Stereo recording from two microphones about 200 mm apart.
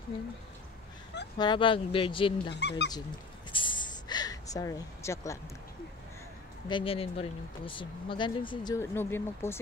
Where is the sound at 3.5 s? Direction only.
25° left (ahead or behind).